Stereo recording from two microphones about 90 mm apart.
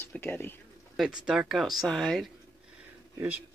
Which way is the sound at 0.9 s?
10° right (ahead or behind).